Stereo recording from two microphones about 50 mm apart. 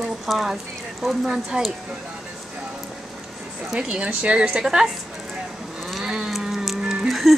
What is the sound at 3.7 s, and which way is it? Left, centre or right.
Speech, centre.